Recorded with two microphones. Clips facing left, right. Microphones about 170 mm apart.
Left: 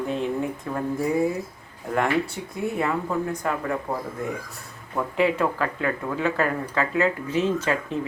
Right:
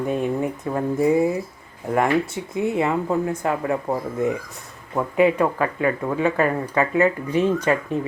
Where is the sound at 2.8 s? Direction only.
25° right (ahead or behind).